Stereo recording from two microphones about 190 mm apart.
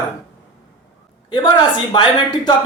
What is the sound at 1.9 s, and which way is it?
Speech, 25° left (ahead or behind).